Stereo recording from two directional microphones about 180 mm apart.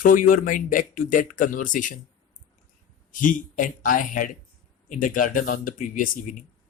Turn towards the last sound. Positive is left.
turn(degrees=45)  # may be behind; listen again after turning